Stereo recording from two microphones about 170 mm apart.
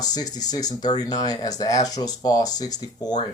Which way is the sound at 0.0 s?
20° left (ahead or behind).